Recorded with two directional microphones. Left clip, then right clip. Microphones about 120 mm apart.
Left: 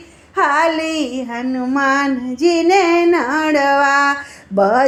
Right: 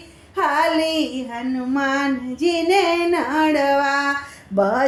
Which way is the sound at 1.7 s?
25° left (ahead or behind).